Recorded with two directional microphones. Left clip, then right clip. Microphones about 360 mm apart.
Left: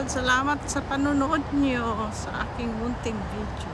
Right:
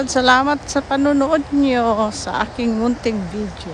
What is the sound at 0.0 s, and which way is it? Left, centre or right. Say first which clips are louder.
Speech: right 10 dB; centre.